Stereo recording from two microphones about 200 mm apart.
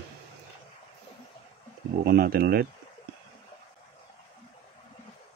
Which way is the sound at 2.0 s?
50° right (ahead or behind).